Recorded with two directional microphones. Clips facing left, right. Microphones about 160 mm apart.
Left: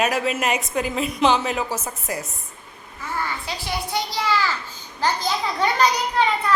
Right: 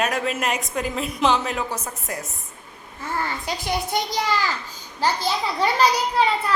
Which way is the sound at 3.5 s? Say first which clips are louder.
Right 3 dB; 45° right (ahead or behind).